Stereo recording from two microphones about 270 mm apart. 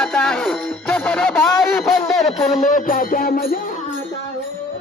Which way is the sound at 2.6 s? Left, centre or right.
Left.